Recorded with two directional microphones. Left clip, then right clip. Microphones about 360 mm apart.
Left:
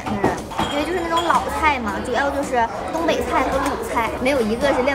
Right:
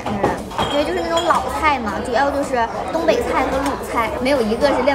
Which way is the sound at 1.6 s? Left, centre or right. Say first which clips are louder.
Right 1 dB; centre.